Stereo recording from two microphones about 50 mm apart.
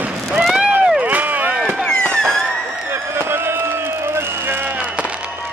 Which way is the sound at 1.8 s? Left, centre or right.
Centre.